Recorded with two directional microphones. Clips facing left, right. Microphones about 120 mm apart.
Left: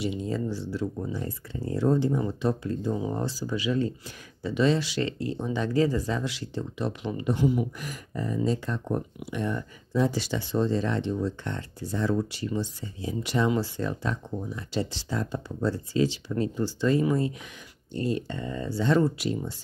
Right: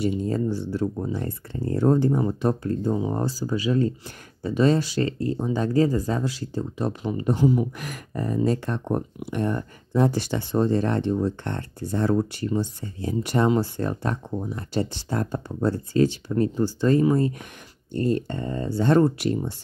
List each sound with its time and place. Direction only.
0.0 s speech: 45° right (ahead or behind)
2.9 s speech: 30° right (ahead or behind)
3.3 s speech: 40° right (ahead or behind)
7.8 s speech: 65° right (ahead or behind)
9.3 s speech: 45° right (ahead or behind)